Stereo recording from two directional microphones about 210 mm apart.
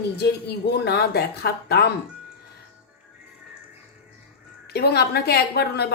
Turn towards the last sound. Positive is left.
turn(degrees=50)  # may be behind; listen again after turning